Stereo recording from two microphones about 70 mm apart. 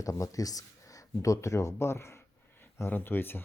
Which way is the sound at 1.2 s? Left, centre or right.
Left.